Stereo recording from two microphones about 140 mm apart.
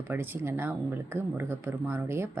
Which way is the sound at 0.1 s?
15° right (ahead or behind).